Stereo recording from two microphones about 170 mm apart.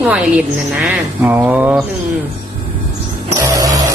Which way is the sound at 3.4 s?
20° right (ahead or behind).